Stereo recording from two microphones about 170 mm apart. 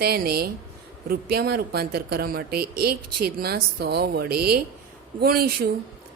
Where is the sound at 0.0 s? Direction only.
65° right (ahead or behind).